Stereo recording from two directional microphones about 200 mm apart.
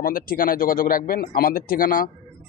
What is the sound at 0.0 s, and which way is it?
A man's voice, 45° left (ahead or behind).